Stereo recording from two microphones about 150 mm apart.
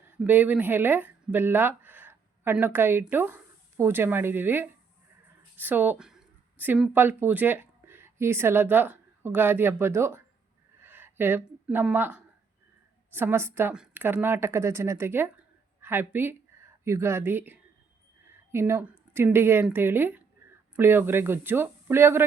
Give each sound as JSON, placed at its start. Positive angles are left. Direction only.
{"t": 0.2, "sound": "speech", "side_deg": -10}
{"t": 10.8, "sound": "a sound", "side_deg": -15}
{"t": 13.1, "sound": "speech", "side_deg": -15}